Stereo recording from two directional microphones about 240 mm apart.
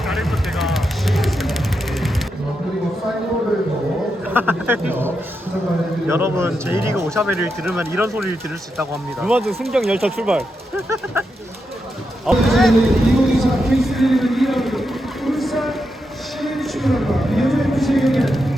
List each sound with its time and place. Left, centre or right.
0.0 s vehicle: centre
4.4 s speech: centre
6.1 s speech: centre
9.2 s speech: centre
10.8 s speech: centre
12.2 s a sound: centre